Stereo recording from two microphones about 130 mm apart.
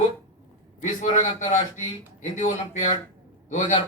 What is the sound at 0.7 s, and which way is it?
A man's voice, 70° left (ahead or behind).